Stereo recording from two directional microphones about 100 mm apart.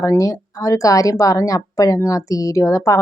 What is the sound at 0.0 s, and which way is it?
A woman's voice, 30° left (ahead or behind).